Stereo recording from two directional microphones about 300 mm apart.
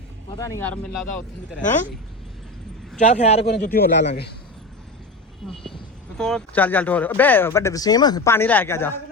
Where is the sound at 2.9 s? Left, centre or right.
Left.